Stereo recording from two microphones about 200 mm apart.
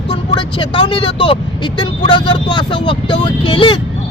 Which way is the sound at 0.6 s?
25° left (ahead or behind).